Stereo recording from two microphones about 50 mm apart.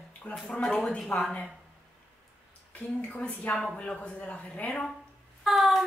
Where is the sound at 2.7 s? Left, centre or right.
Left.